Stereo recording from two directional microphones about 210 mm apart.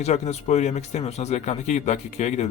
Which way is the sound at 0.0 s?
30° left (ahead or behind).